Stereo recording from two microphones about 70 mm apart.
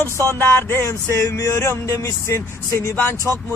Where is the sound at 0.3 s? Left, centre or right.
Left.